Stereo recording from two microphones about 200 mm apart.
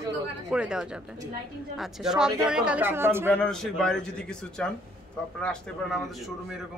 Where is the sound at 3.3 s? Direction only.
5° left (ahead or behind).